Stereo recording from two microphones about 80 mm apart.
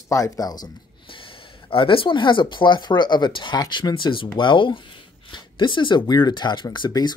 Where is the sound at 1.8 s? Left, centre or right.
Left.